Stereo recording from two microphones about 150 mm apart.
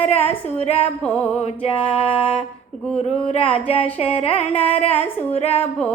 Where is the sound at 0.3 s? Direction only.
45° left (ahead or behind).